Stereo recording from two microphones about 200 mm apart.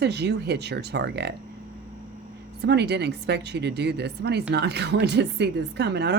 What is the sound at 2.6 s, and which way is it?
A woman's voice, 55° right (ahead or behind).